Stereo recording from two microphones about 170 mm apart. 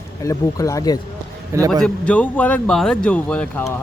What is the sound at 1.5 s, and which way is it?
Speech, 20° right (ahead or behind).